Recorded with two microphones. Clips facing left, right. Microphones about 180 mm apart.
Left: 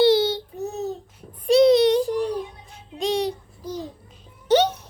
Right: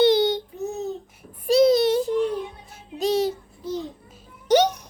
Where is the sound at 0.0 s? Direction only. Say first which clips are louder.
Even; 20° right (ahead or behind).